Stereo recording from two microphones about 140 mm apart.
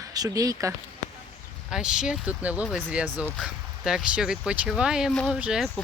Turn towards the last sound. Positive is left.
turn(degrees=-5)  # may be behind; listen again after turning